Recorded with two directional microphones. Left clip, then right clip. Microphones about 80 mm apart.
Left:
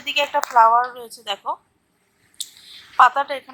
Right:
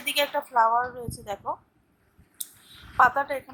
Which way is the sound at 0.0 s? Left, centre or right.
Left.